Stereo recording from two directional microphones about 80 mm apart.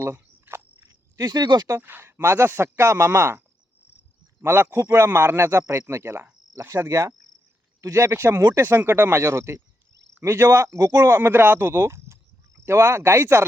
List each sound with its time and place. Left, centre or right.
0.0 s insect: right
0.9 s speech: right
1.8 s speech: right
4.4 s speech: right
11.0 s speech: right